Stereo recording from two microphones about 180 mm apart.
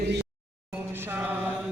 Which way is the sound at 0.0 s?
70° right (ahead or behind).